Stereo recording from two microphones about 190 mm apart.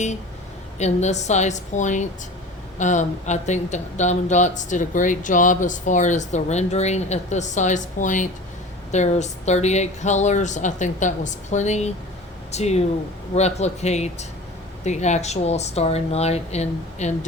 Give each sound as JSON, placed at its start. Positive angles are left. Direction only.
{"t": 0.8, "sound": "speech", "side_deg": 35}